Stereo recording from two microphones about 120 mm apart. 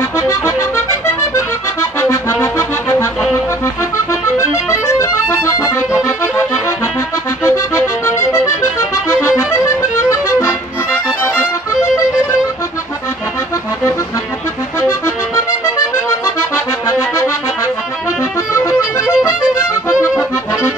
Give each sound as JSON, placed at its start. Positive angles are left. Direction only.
{"t": 0.3, "sound": "accordion", "side_deg": 20}
{"t": 4.1, "sound": "accordion", "side_deg": 25}
{"t": 7.4, "sound": "accordion", "side_deg": 20}
{"t": 10.0, "sound": "music", "side_deg": 25}
{"t": 14.8, "sound": "accordion", "side_deg": 20}
{"t": 18.5, "sound": "music", "side_deg": 25}
{"t": 19.0, "sound": "music", "side_deg": -10}